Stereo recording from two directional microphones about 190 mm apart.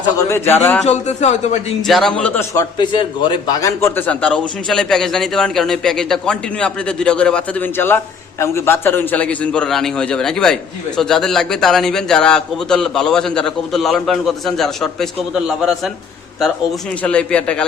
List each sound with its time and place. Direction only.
0.2 s speech: 15° left (ahead or behind)
0.9 s speech: 35° left (ahead or behind)
1.9 s a man's voice: centre (ahead or behind)
2.6 s a man's voice: 25° left (ahead or behind); by 14.8 s centre (ahead or behind)
17.0 s speech: 5° left (ahead or behind)